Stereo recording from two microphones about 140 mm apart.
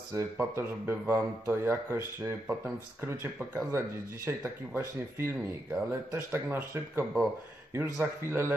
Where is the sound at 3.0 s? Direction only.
15° right (ahead or behind).